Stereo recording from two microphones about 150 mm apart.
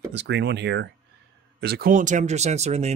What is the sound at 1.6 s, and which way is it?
Speech, 85° right.